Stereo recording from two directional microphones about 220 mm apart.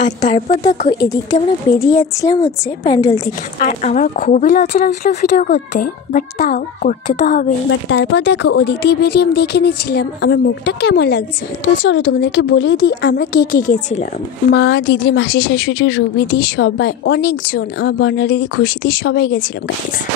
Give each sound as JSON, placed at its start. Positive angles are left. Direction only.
{"t": 0.3, "sound": "speech", "side_deg": 20}
{"t": 3.5, "sound": "a woman's voice", "side_deg": 35}
{"t": 7.9, "sound": "a woman's voice", "side_deg": 55}
{"t": 14.5, "sound": "a woman's voice", "side_deg": 55}